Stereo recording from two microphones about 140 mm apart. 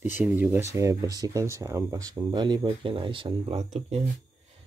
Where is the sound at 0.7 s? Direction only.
20° right (ahead or behind); by 4.0 s 50° right (ahead or behind).